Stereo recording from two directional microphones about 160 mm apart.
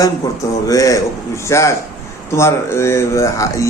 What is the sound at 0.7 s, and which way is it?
A man's voice, 20° left (ahead or behind).